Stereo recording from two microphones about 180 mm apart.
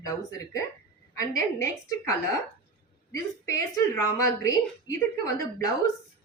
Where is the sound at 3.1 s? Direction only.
15° left (ahead or behind).